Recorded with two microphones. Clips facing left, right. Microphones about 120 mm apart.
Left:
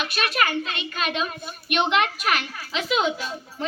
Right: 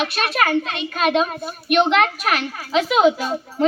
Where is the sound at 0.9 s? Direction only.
40° right (ahead or behind).